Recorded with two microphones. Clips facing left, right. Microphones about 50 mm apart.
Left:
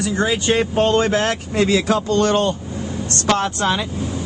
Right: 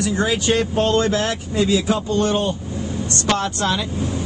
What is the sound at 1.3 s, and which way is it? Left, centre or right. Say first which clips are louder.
Speech: left 1 dB; left.